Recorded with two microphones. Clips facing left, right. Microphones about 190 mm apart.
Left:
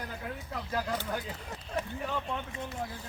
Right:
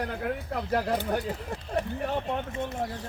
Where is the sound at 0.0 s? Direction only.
65° right (ahead or behind).